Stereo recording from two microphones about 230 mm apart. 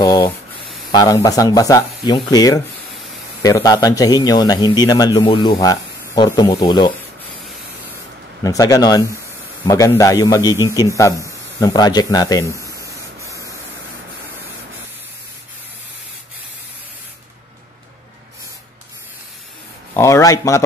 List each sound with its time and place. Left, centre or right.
0.0 s a man's voice: centre
8.5 s a man's voice: centre
10.5 s a man's voice: centre
10.8 s a man's voice: centre
19.9 s speech: centre